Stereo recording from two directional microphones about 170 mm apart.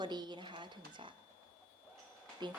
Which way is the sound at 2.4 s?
25° right (ahead or behind).